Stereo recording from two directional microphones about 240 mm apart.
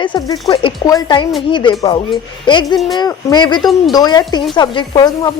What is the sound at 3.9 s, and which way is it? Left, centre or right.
Speech, centre.